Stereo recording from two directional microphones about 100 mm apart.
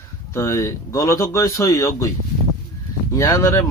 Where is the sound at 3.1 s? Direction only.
35° left (ahead or behind).